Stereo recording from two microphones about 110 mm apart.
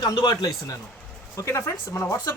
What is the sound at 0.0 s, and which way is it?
Speech, 40° left (ahead or behind).